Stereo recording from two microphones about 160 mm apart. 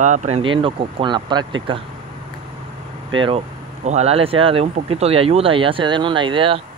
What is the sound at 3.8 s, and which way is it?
Speech, 45° right (ahead or behind).